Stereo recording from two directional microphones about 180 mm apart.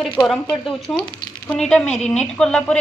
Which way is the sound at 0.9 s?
20° left (ahead or behind).